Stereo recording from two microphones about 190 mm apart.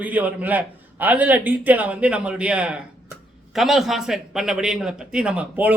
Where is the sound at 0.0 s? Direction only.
10° right (ahead or behind).